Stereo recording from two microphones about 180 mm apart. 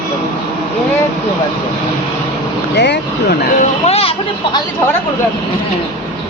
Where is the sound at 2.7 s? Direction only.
75° left (ahead or behind).